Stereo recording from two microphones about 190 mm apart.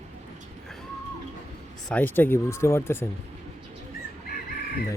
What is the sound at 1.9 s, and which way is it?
Speech, 10° left (ahead or behind).